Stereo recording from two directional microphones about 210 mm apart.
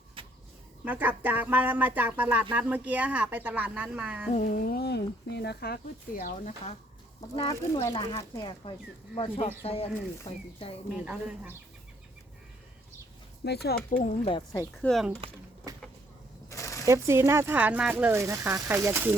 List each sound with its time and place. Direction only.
0.2 s a sound: 25° right (ahead or behind)
0.9 s speech: 10° right (ahead or behind)
4.4 s speech: 40° left (ahead or behind)
7.3 s speech: 15° left (ahead or behind)
10.9 s speech: 5° right (ahead or behind)
13.4 s speech: 50° left (ahead or behind)
14.3 s speech: 20° left (ahead or behind)
14.8 s speech: centre (ahead or behind)
15.7 s speech: 15° right (ahead or behind)
16.5 s a sound: 15° left (ahead or behind)
16.8 s speech: 15° right (ahead or behind)